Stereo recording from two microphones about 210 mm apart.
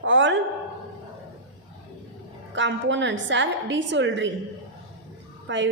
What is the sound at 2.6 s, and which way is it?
A woman's voice, 60° right (ahead or behind).